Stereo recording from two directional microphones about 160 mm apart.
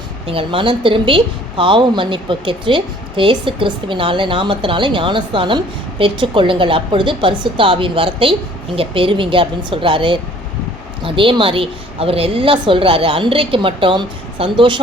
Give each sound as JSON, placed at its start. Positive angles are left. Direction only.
{"t": 0.3, "sound": "a woman's voice", "side_deg": -35}